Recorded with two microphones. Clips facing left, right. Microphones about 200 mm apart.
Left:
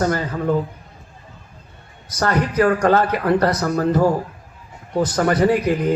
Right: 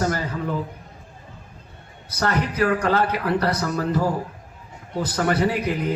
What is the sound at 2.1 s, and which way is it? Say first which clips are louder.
Speech: left 4 dB; 45° left (ahead or behind).